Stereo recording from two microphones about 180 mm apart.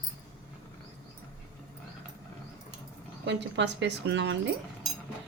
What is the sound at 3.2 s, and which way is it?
A woman's voice, 80° right.